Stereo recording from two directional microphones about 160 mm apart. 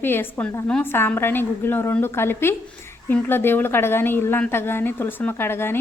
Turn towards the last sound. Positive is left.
turn(degrees=15)  # may be behind; listen again after turning